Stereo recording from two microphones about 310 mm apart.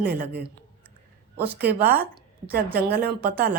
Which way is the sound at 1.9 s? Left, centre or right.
Centre.